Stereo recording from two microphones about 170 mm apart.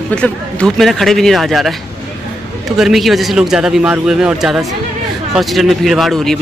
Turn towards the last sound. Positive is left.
turn(degrees=0)  # may be behind; listen again after turning